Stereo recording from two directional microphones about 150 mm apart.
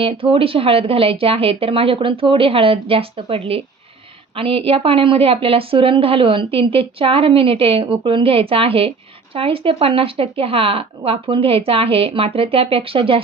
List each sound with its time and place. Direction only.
0.0 s a woman's voice: 35° right (ahead or behind)